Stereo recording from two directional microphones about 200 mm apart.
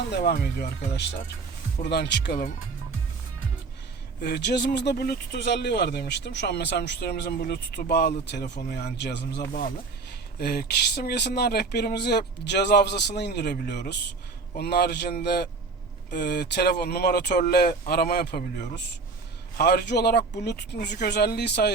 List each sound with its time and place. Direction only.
0.1 s speech: 55° left (ahead or behind)
4.2 s speech: 55° left (ahead or behind)
19.5 s speech: 55° left (ahead or behind)